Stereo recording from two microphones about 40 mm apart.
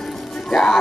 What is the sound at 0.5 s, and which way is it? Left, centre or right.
Music, centre.